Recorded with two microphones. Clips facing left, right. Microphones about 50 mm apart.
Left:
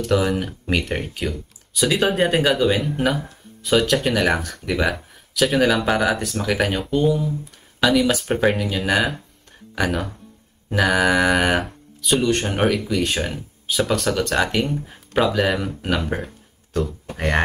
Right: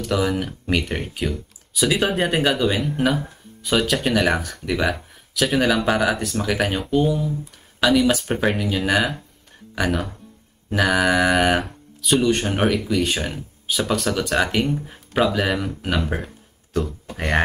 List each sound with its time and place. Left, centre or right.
0.0 s speech: centre